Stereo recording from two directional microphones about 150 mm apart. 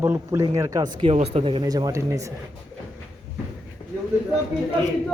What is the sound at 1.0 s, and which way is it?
A man's voice, 40° right (ahead or behind).